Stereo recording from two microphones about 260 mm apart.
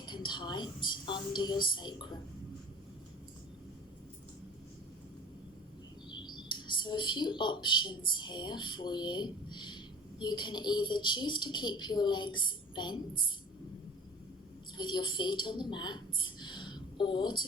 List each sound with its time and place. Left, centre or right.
0.0 s a woman's voice: centre
6.1 s speech: centre
14.8 s a woman's voice: centre